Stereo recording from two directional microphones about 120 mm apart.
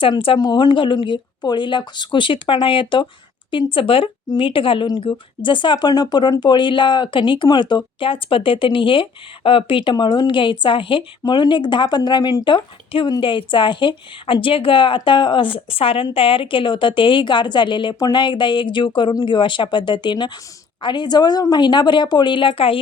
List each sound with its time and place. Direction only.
0.0 s a woman's voice: 45° left (ahead or behind)
0.3 s a woman's voice: 35° left (ahead or behind)